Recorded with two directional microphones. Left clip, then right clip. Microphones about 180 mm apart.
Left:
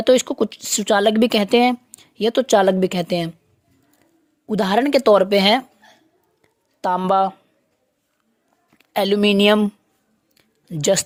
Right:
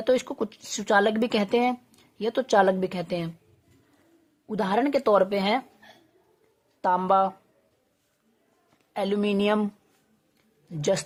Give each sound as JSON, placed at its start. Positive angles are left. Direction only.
{"t": 0.0, "sound": "speech", "side_deg": 35}
{"t": 4.4, "sound": "speech", "side_deg": 35}
{"t": 6.8, "sound": "speech", "side_deg": 40}
{"t": 8.9, "sound": "speech", "side_deg": 40}
{"t": 10.3, "sound": "a sound", "side_deg": 35}